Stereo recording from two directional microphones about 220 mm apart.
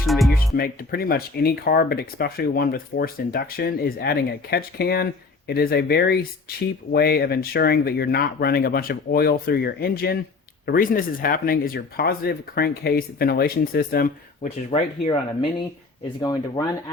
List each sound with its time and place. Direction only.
0.0 s music: centre (ahead or behind)
0.5 s speech: 45° left (ahead or behind)
14.7 s speech: 25° left (ahead or behind)
16.6 s speech: 15° left (ahead or behind)